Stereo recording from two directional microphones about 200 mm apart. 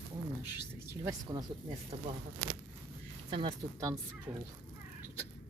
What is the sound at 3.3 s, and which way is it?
Speech, 20° right (ahead or behind).